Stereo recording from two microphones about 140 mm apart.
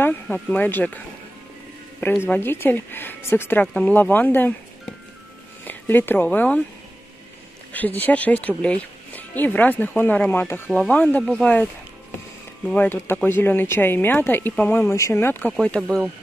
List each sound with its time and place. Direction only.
0.0 s speech: 15° left (ahead or behind)
2.2 s speech: 15° left (ahead or behind)
5.7 s speech: 15° left (ahead or behind)
7.7 s speech: 10° left (ahead or behind)
12.6 s speech: 10° left (ahead or behind)